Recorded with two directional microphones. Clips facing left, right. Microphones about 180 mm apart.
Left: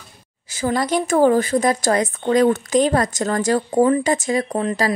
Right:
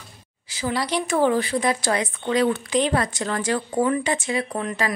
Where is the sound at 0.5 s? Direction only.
45° left (ahead or behind).